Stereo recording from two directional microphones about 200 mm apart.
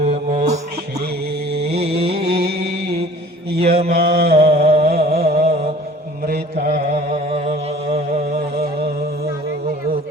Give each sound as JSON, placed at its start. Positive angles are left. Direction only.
{"t": 0.0, "sound": "mantra", "side_deg": -30}
{"t": 1.6, "sound": "mantra", "side_deg": -30}
{"t": 2.2, "sound": "a sound", "side_deg": -50}
{"t": 3.6, "sound": "mantra", "side_deg": -30}
{"t": 3.8, "sound": "mantra", "side_deg": -55}
{"t": 4.2, "sound": "a sound", "side_deg": -55}
{"t": 4.5, "sound": "a sound", "side_deg": -30}
{"t": 4.8, "sound": "music", "side_deg": -50}
{"t": 5.1, "sound": "mantra", "side_deg": -30}
{"t": 6.2, "sound": "mantra", "side_deg": -50}
{"t": 7.9, "sound": "music", "side_deg": -50}